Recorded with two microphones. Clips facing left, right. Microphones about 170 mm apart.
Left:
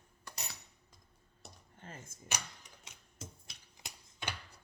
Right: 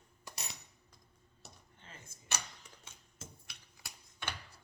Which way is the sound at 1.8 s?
45° left (ahead or behind).